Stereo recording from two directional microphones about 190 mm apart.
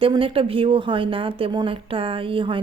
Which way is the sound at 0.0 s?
30° right (ahead or behind).